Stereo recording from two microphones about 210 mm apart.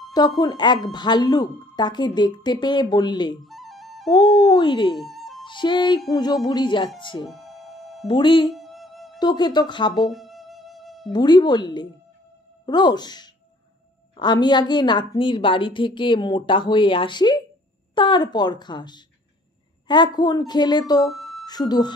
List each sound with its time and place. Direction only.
0.4 s a woman's voice: 20° left (ahead or behind)
3.4 s music: centre (ahead or behind)
4.1 s a woman's voice: 20° left (ahead or behind)
4.9 s music: centre (ahead or behind)
5.5 s a woman's voice: 20° left (ahead or behind)
7.2 s music: centre (ahead or behind)
8.1 s a woman's voice: 25° left (ahead or behind)
8.5 s music: centre (ahead or behind)
9.2 s a woman's voice: 20° left (ahead or behind)
10.0 s music: centre (ahead or behind)
11.1 s a woman's voice: 20° left (ahead or behind)
21.1 s music: centre (ahead or behind)
21.5 s a woman's voice: 20° left (ahead or behind)